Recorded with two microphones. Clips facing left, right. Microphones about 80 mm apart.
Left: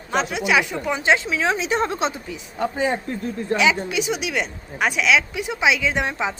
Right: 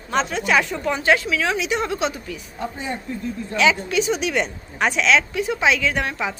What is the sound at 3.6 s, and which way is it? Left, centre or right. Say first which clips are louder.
A woman's voice: right 3 dB; centre.